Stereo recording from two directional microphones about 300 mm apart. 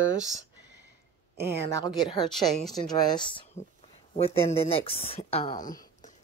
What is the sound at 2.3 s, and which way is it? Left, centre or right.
Speech, centre.